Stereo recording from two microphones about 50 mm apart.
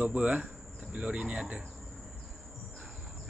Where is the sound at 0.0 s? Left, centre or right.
Right.